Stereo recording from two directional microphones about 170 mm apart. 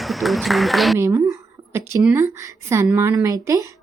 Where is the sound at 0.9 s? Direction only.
20° right (ahead or behind).